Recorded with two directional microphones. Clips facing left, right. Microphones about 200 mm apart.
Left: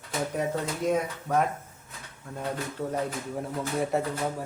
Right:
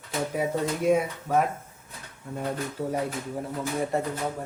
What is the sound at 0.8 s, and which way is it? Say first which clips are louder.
Speech: right 4 dB; 10° right (ahead or behind).